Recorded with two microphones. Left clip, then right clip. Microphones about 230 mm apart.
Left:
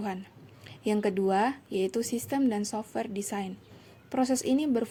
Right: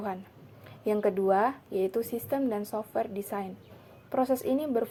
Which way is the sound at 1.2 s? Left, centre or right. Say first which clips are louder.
Right 1 dB; left.